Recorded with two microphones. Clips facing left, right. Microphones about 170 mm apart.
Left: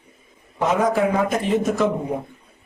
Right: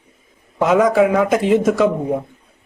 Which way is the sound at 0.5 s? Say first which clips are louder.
Right 6 dB; 90° right.